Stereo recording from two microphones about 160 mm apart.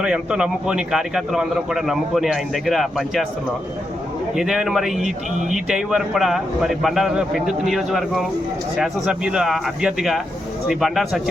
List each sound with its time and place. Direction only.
0.0 s speech: 5° right (ahead or behind)
4.4 s speech: 5° right (ahead or behind)